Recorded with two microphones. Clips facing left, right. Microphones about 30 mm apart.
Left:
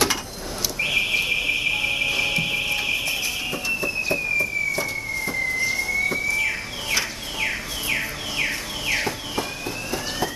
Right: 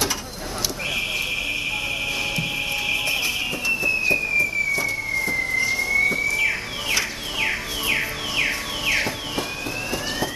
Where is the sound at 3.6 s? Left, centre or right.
Centre.